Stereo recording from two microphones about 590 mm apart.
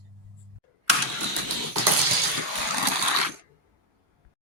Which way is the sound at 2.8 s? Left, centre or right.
Right.